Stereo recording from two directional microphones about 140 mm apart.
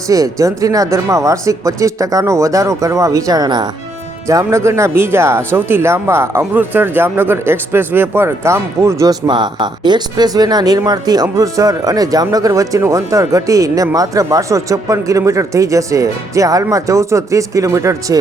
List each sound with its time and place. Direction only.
0.1 s speech: 25° right (ahead or behind)